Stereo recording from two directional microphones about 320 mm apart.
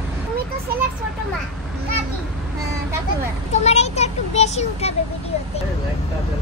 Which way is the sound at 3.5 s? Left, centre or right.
Centre.